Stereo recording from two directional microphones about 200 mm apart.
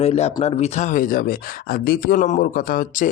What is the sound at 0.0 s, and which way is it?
Speech, 30° left (ahead or behind).